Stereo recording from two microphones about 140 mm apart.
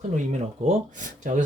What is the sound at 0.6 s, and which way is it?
Speech, 55° right (ahead or behind).